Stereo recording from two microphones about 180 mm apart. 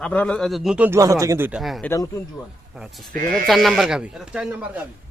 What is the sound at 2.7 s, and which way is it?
Speech, centre (ahead or behind).